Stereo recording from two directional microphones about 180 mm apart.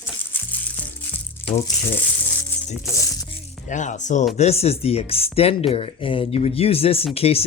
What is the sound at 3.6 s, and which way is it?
Speech, 45° left (ahead or behind).